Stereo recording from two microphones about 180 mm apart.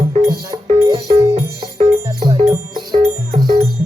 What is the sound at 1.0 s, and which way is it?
Music, 40° right (ahead or behind).